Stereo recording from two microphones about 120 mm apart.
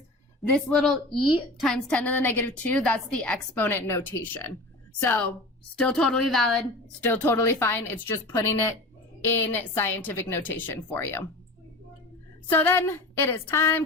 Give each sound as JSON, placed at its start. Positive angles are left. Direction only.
{"t": 0.5, "sound": "a woman's voice", "side_deg": 5}
{"t": 2.1, "sound": "a woman's voice", "side_deg": 15}
{"t": 7.0, "sound": "a woman's voice", "side_deg": 15}
{"t": 12.5, "sound": "speech", "side_deg": 15}